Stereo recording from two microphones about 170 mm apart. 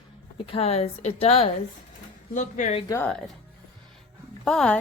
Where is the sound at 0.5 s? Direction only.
35° left (ahead or behind).